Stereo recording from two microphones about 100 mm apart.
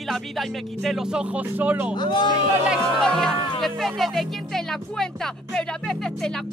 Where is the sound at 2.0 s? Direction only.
50° left (ahead or behind).